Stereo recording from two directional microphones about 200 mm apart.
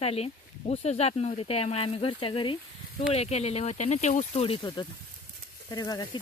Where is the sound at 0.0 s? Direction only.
30° left (ahead or behind).